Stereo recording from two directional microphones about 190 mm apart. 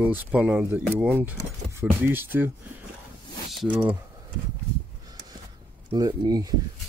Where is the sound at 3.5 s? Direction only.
Centre (ahead or behind).